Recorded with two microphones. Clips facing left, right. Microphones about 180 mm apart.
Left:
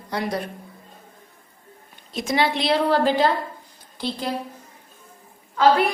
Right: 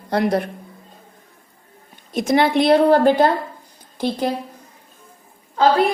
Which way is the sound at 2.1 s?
50° right (ahead or behind).